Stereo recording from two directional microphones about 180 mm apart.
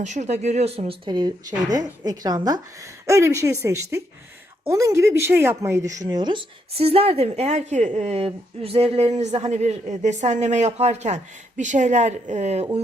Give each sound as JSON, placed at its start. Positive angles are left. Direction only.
{"t": 0.0, "sound": "a woman's voice", "side_deg": -40}